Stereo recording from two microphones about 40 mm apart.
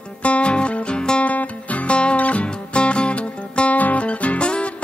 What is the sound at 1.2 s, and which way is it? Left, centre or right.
Music, left.